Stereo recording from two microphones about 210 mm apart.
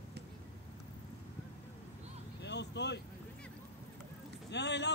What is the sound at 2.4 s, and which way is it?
Vehicle, 55° left (ahead or behind).